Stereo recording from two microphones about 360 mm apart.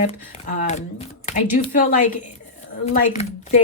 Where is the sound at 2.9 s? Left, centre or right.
Centre.